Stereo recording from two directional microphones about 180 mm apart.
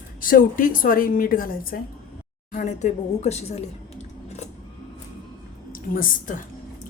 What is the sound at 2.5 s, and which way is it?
A woman's voice, 40° left (ahead or behind).